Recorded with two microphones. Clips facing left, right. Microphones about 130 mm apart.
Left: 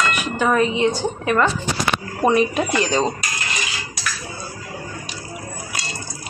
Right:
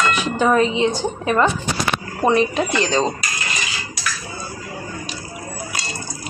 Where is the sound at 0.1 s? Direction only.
30° right (ahead or behind).